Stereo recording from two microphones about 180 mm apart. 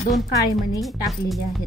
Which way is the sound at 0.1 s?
Centre (ahead or behind).